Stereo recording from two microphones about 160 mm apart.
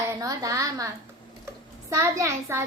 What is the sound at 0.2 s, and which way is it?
Speech, 20° right (ahead or behind).